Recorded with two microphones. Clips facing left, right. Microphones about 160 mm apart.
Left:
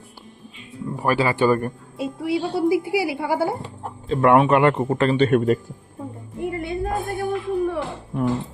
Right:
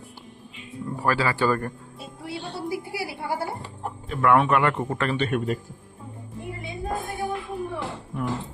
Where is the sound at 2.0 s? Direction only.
90° left.